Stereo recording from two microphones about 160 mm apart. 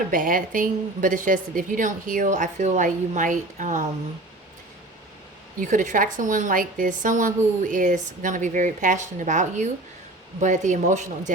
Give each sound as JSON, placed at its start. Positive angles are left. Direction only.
{"t": 0.1, "sound": "a woman's voice", "side_deg": -60}
{"t": 5.5, "sound": "a woman's voice", "side_deg": -55}